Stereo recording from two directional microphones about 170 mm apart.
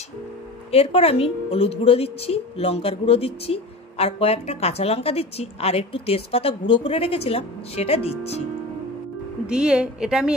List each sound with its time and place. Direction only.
0.7 s a woman's voice: 35° left (ahead or behind)
9.5 s a woman's voice: 5° right (ahead or behind)